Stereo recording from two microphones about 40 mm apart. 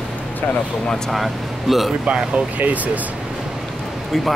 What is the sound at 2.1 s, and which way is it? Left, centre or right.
Speech, right.